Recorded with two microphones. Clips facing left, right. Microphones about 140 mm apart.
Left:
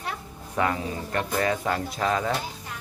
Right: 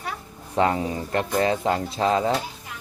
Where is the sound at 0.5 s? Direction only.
30° right (ahead or behind).